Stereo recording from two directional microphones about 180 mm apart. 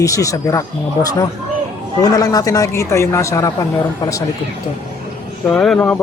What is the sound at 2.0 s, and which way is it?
Speech, 20° left (ahead or behind).